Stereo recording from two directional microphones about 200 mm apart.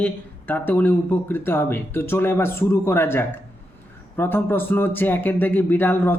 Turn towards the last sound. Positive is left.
turn(degrees=10)  # may be behind; listen again after turning